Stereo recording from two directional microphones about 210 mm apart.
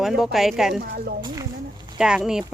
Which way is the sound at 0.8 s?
45° right (ahead or behind).